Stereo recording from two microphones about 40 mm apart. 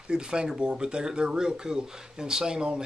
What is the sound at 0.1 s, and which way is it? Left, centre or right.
Speech, right.